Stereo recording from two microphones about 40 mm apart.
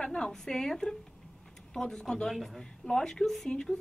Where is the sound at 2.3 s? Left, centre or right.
Centre.